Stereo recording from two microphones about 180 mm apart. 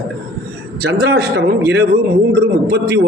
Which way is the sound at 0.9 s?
65° right (ahead or behind).